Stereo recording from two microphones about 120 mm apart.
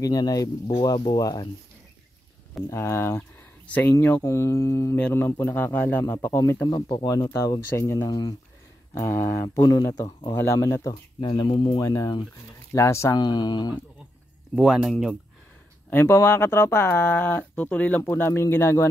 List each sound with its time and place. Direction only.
0.0 s speech: 30° left (ahead or behind)
2.7 s speech: 20° left (ahead or behind)
3.2 s a sound: 10° left (ahead or behind)
3.9 s a man's voice: 20° left (ahead or behind)
8.1 s speech: 35° left (ahead or behind)
9.0 s speech: 20° left (ahead or behind)
11.1 s speech: 40° left (ahead or behind)
14.5 s speech: 5° right (ahead or behind)
15.9 s speech: 20° left (ahead or behind)